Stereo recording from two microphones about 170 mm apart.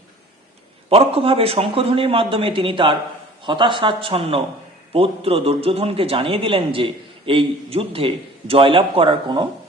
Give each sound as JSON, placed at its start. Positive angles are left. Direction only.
{"t": 0.9, "sound": "speech", "side_deg": -35}